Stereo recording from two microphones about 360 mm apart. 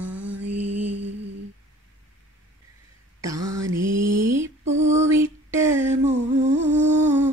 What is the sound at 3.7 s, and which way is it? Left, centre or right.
Mantra, right.